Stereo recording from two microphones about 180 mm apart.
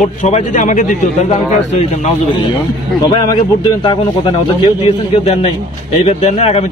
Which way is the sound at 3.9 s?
25° left (ahead or behind).